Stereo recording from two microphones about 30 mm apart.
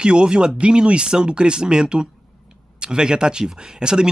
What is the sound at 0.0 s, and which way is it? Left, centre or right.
Speech, right.